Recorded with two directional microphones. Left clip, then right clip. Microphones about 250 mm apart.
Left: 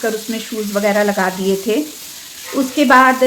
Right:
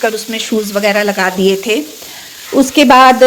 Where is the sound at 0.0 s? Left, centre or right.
Right.